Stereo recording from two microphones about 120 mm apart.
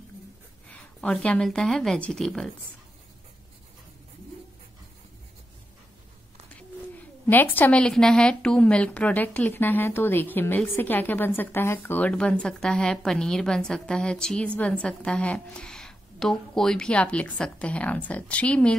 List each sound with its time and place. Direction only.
0.7 s speech: 10° left (ahead or behind)
6.5 s a woman's voice: 15° left (ahead or behind)